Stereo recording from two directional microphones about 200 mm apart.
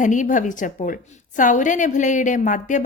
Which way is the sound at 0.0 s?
40° left (ahead or behind).